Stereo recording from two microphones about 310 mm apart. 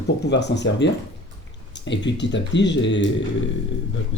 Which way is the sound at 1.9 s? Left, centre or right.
Left.